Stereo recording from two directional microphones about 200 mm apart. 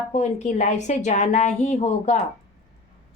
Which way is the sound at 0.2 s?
35° left (ahead or behind).